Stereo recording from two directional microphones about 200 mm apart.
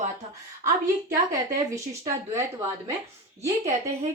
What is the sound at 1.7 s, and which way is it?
A woman's voice, 15° right (ahead or behind).